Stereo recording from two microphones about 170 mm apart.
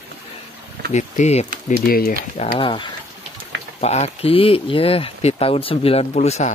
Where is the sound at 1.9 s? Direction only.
60° left (ahead or behind).